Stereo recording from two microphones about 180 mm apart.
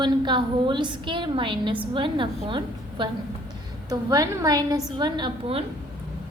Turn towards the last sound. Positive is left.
turn(degrees=-30)  # may be behind; listen again after turning